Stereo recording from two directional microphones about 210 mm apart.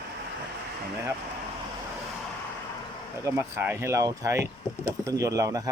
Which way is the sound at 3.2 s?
10° right (ahead or behind).